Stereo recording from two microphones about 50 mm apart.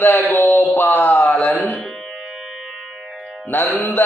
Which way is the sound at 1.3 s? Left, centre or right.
Left.